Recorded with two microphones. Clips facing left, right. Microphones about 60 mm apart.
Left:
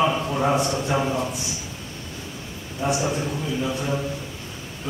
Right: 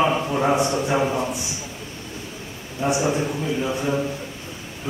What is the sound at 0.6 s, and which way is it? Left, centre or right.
Speech, right.